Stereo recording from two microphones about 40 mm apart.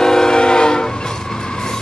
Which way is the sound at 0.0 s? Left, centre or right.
Centre.